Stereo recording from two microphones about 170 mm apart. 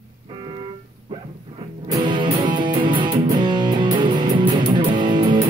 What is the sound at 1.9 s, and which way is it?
Music, 30° right (ahead or behind).